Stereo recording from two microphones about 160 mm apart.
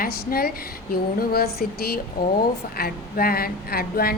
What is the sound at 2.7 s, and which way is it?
Speech, 70° left (ahead or behind).